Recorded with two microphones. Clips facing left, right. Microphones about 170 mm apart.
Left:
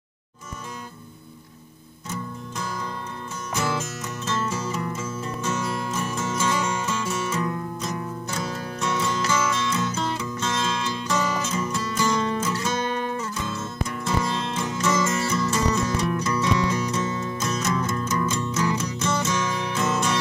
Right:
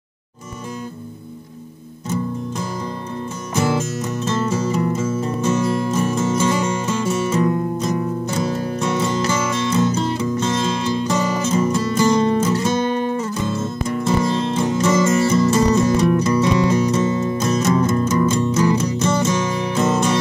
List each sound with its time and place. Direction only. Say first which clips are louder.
3.7 s music: right 8 dB; 25° right (ahead or behind)